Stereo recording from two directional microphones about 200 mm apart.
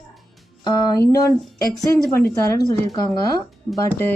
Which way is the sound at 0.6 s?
20° left (ahead or behind).